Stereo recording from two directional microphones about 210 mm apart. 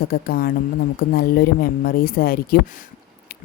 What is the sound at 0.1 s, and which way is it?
Speech, 45° left (ahead or behind).